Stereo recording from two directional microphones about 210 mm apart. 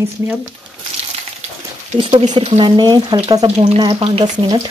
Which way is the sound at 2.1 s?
20° right (ahead or behind).